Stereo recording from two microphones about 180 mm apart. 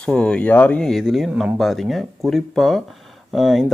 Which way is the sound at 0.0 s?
5° left (ahead or behind).